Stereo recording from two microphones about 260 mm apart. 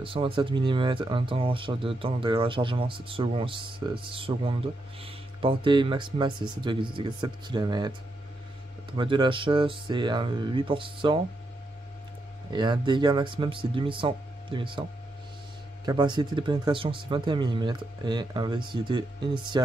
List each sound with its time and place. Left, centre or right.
0.0 s speech: centre
8.9 s speech: centre
12.5 s speech: centre